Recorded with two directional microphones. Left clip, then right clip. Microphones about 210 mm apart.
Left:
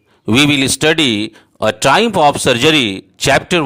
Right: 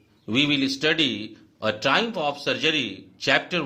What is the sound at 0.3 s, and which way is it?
Speech, 50° left (ahead or behind).